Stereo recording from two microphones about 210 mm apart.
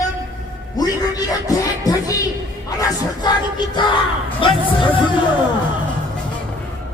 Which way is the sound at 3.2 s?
20° left (ahead or behind).